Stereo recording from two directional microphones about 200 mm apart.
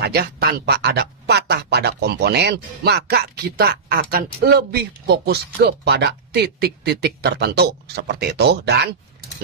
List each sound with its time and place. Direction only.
0.0 s speech: 55° right (ahead or behind)